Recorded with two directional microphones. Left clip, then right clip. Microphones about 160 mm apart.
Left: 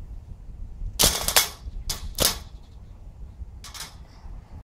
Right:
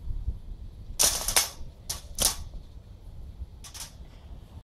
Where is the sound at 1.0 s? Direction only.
35° left (ahead or behind).